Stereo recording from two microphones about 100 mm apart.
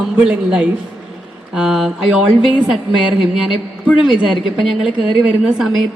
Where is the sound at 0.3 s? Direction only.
10° right (ahead or behind).